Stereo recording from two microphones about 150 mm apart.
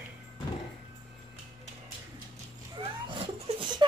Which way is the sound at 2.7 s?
35° right (ahead or behind).